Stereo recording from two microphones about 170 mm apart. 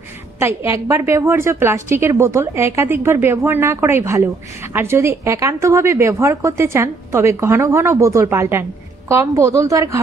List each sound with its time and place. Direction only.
0.4 s a woman's voice: 15° right (ahead or behind)